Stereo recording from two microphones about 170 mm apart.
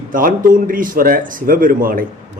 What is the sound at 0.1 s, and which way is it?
Speech, 55° right (ahead or behind).